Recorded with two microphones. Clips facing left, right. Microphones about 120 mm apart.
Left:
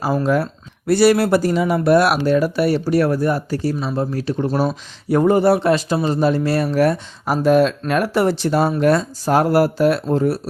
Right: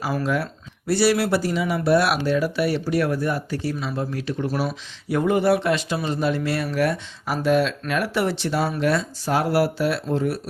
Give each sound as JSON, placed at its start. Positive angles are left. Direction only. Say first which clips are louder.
{"t": 0.1, "sound": "speech", "louder": "left 6 dB", "side_deg": 35}
{"t": 0.9, "sound": "speech", "louder": "left 6 dB", "side_deg": 50}